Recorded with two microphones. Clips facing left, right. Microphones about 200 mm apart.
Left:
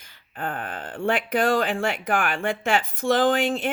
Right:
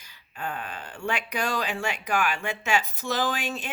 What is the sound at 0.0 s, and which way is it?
Speech, 50° left (ahead or behind).